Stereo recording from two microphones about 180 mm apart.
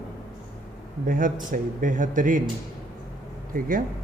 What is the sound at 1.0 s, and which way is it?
A man's voice, 50° right (ahead or behind).